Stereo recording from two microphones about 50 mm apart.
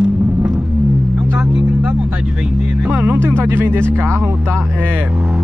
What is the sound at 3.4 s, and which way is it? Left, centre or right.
Speech, right.